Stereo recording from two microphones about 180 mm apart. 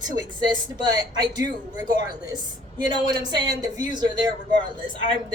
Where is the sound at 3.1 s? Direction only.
20° right (ahead or behind).